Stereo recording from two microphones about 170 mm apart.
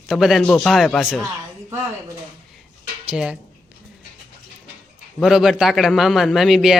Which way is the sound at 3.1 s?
5° right (ahead or behind).